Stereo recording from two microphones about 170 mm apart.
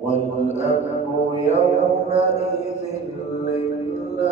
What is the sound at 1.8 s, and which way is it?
Mantra, 40° left (ahead or behind).